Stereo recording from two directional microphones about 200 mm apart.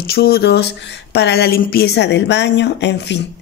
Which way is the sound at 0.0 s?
50° left (ahead or behind).